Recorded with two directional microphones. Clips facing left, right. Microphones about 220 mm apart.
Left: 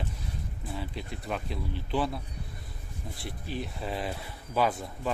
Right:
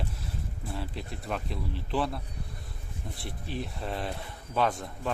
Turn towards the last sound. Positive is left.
turn(degrees=5)  # may be behind; listen again after turning